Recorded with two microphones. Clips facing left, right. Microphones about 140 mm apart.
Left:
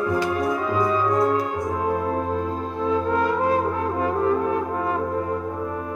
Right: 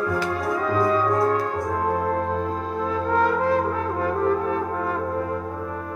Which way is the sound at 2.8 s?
20° left (ahead or behind).